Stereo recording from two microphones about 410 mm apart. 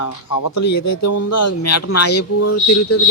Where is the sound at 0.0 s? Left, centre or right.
Left.